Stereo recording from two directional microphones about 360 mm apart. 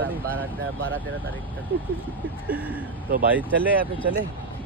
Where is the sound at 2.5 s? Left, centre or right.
Centre.